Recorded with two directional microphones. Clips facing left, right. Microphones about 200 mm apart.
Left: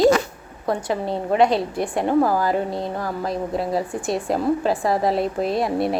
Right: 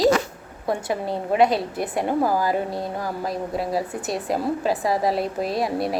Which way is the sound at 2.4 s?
25° left (ahead or behind).